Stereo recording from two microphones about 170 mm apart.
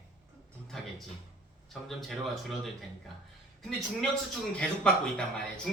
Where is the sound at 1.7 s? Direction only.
Centre (ahead or behind).